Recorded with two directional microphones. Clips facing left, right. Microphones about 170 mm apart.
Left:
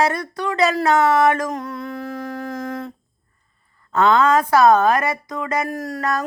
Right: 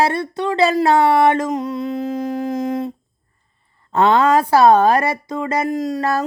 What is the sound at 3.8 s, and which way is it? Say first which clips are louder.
Music: right 1 dB; 30° right (ahead or behind).